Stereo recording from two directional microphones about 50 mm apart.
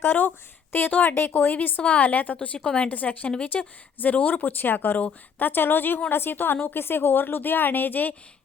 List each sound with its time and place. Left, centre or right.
0.0 s speech: left
1.1 s a woman's voice: left
1.5 s a woman's voice: left
5.5 s a woman's voice: left